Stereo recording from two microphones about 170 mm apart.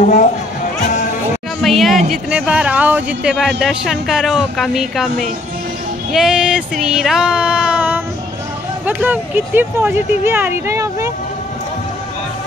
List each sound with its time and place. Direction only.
0.0 s speech: 45° left (ahead or behind)
1.6 s speech: centre (ahead or behind); by 11.1 s 15° right (ahead or behind)